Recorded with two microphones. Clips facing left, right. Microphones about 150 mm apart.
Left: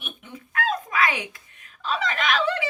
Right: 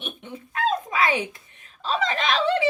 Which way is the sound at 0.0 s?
25° right (ahead or behind).